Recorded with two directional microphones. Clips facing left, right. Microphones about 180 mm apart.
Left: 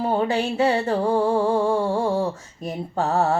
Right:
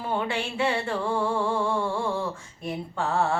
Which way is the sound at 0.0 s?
40° left (ahead or behind).